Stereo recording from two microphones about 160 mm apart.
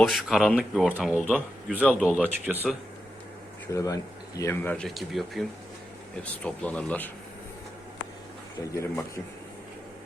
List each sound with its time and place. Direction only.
0.0 s speech: centre (ahead or behind)
3.7 s speech: 20° left (ahead or behind)
8.5 s speech: 20° left (ahead or behind)